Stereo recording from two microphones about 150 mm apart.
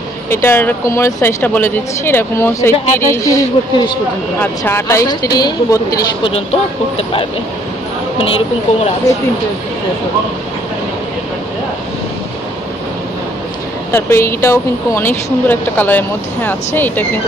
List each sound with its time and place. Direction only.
0.3 s speech: 15° left (ahead or behind)
4.4 s a woman's voice: 15° left (ahead or behind)
6.2 s speech: 40° left (ahead or behind)
13.9 s speech: 15° left (ahead or behind)